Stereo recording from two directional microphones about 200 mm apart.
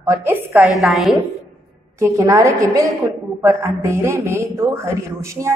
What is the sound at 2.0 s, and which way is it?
A woman's voice, 15° right (ahead or behind).